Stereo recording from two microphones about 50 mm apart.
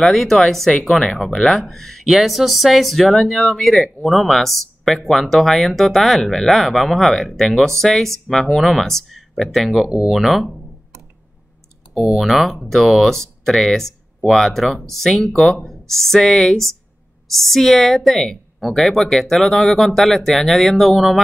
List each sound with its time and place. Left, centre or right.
0.0 s speech: centre
9.8 s speech: centre
10.1 s speech: centre
11.9 s speech: centre